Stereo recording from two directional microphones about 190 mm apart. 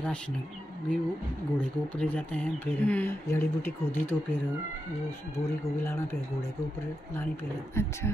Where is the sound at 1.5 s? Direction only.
5° left (ahead or behind).